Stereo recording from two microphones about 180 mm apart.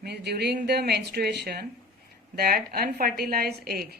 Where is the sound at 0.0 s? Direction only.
65° right (ahead or behind).